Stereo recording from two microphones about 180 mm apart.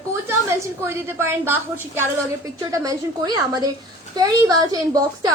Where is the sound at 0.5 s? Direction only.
15° right (ahead or behind).